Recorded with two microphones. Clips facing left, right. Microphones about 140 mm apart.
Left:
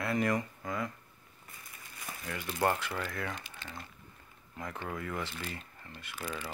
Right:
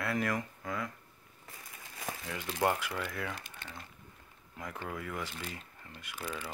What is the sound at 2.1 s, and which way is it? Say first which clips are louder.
Crumpling: right 5 dB; 90° right.